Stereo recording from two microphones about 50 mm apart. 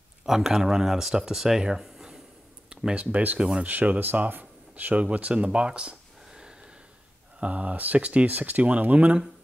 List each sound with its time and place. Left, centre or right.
0.2 s speech: centre
2.7 s speech: centre
3.3 s speech: centre
3.6 s speech: right
4.3 s a sound: right
5.0 s a sound: right
7.3 s speech: right